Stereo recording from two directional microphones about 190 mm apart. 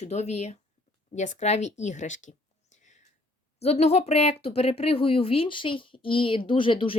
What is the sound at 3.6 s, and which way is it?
Speech, 35° left (ahead or behind).